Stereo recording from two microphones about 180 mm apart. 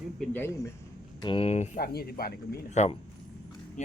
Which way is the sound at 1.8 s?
60° left (ahead or behind).